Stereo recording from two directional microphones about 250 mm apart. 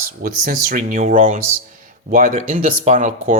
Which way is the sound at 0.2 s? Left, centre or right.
Right.